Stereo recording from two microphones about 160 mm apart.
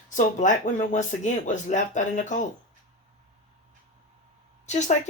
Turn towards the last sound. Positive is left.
turn(degrees=50)  # may be behind; listen again after turning